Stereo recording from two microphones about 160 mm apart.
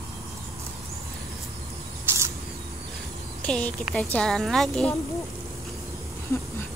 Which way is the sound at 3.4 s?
5° left (ahead or behind).